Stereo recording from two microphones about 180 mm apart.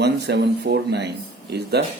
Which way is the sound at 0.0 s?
70° right (ahead or behind).